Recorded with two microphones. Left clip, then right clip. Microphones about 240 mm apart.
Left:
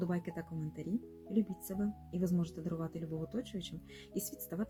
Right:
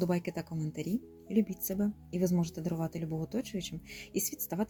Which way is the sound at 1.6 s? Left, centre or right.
Right.